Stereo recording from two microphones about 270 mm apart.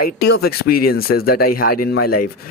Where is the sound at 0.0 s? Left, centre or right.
Left.